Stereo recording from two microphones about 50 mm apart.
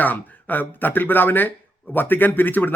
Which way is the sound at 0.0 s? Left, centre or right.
Left.